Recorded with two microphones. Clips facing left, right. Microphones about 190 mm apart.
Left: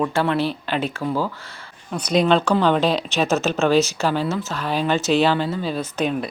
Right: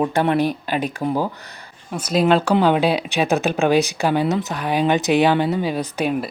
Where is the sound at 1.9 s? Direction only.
5° right (ahead or behind).